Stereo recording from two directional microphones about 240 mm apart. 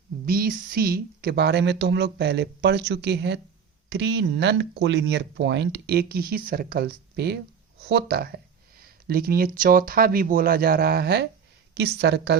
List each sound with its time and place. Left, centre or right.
0.3 s speech: right